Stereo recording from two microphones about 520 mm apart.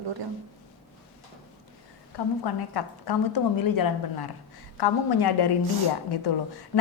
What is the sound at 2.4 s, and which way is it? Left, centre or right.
A woman's voice, left.